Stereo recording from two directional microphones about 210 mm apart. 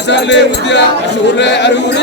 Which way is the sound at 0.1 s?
55° left (ahead or behind).